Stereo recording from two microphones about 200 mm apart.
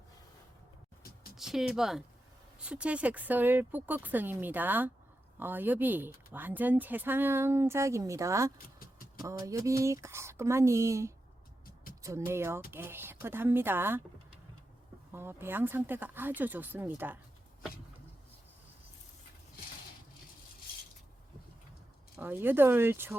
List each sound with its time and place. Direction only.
1.4 s speech: centre (ahead or behind)
8.5 s vehicle: 45° left (ahead or behind)
9.4 s speech: 15° right (ahead or behind)
15.1 s speech: 10° right (ahead or behind)
22.2 s speech: 10° right (ahead or behind)